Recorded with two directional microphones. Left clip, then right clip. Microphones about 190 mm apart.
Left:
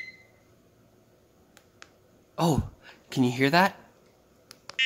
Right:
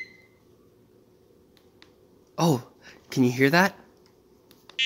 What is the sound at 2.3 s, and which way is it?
Speech, 15° right (ahead or behind).